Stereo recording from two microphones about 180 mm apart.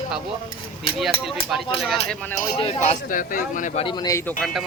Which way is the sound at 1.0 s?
Centre (ahead or behind).